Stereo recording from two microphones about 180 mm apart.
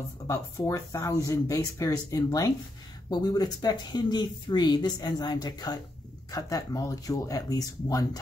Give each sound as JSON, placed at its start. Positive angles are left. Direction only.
{"t": 0.3, "sound": "speech", "side_deg": 15}